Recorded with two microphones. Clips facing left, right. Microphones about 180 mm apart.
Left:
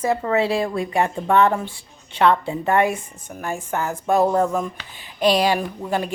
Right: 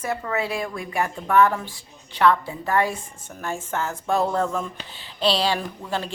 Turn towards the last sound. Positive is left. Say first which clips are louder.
# left 5 dB
turn(degrees=15)  # may be behind; listen again after turning